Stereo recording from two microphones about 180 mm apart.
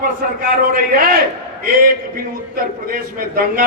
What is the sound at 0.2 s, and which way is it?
Speech, 50° right (ahead or behind).